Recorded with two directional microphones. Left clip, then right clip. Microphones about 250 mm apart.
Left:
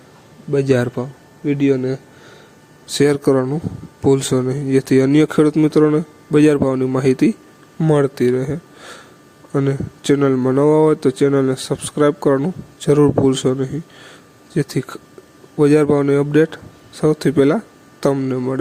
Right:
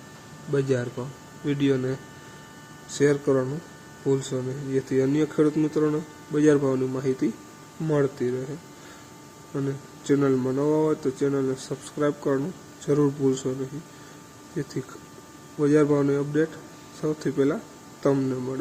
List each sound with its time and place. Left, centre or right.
0.5 s speech: left
2.9 s speech: left
9.6 s speech: left